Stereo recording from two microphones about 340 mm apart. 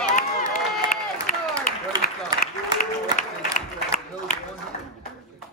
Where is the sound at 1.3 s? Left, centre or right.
Left.